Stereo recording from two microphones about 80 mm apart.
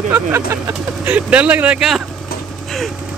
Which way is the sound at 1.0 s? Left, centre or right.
Centre.